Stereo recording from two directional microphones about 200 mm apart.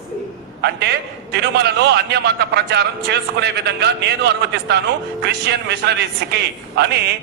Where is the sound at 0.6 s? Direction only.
55° right (ahead or behind).